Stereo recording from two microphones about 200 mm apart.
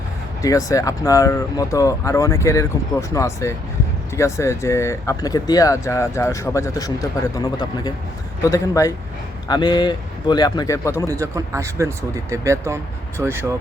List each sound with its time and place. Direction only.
0.4 s speech: 15° left (ahead or behind)
11.1 s speech: 15° right (ahead or behind)